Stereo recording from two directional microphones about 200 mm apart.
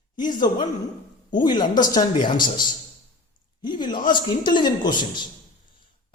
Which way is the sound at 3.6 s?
20° left (ahead or behind).